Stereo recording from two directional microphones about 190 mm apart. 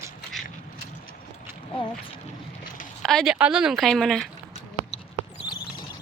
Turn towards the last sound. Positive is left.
turn(degrees=25)  # may be behind; listen again after turning